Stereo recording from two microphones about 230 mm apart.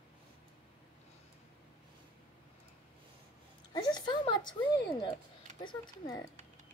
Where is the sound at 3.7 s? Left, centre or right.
Centre.